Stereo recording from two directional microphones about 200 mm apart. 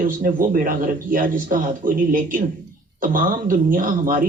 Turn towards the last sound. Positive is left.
turn(degrees=-40)  # may be behind; listen again after turning